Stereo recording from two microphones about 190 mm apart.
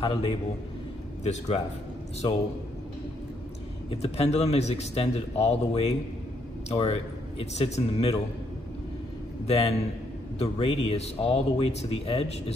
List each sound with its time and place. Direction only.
0.0 s speech: 25° left (ahead or behind)
1.2 s a man's voice: 35° left (ahead or behind)
3.9 s a man's voice: 30° left (ahead or behind)
9.5 s a man's voice: 30° left (ahead or behind)